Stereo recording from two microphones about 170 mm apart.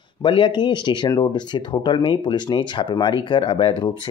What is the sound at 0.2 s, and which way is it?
Speech, 25° left (ahead or behind).